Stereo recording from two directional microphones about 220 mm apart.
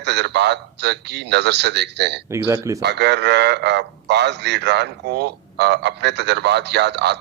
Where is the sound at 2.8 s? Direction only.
50° right (ahead or behind).